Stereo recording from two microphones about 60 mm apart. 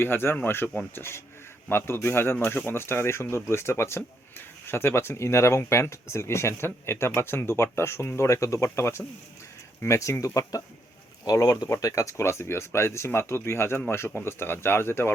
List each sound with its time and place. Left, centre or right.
0.0 s speech: left